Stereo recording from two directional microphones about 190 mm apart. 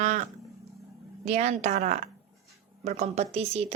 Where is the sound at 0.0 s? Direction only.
40° right (ahead or behind).